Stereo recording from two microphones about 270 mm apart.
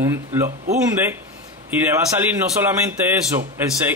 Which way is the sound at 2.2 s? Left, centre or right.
Centre.